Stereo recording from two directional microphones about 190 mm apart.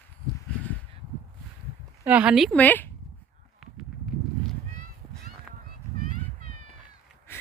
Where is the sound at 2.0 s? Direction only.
10° right (ahead or behind); by 2.9 s 10° left (ahead or behind).